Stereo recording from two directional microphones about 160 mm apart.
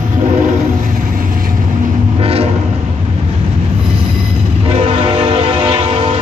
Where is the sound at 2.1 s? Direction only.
40° right (ahead or behind).